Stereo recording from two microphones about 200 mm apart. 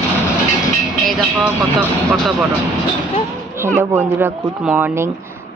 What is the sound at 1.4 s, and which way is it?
Speech, 10° right (ahead or behind).